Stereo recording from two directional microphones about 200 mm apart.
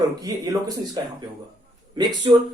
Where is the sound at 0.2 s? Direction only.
20° right (ahead or behind).